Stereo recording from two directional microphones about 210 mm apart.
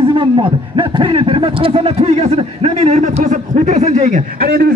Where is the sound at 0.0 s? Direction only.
25° right (ahead or behind).